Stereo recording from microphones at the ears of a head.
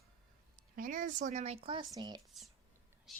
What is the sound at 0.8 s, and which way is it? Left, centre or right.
Speech, right.